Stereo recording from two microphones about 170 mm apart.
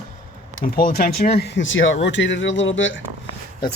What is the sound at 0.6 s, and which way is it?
Speech, 55° left (ahead or behind).